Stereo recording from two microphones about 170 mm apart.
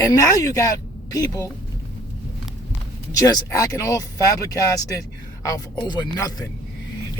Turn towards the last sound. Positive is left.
turn(degrees=25)  # may be behind; listen again after turning